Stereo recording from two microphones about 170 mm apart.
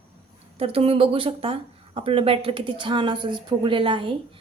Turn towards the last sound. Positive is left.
turn(degrees=-30)  # may be behind; listen again after turning